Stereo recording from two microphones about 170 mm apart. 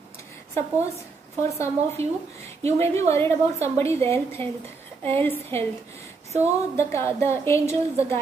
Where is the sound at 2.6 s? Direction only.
15° left (ahead or behind).